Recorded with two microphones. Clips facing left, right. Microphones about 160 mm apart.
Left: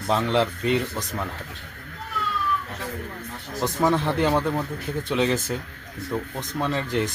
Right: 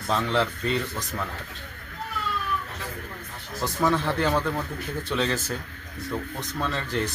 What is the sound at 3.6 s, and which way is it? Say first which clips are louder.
Speech: left 2 dB; 20° left (ahead or behind).